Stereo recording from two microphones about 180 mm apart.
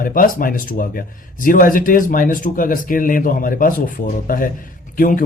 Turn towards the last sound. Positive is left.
turn(degrees=50)  # may be behind; listen again after turning